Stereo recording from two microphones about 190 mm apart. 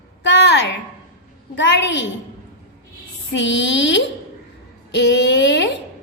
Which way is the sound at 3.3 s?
70° left (ahead or behind).